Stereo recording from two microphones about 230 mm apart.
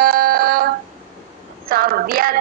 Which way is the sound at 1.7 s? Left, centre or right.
Right.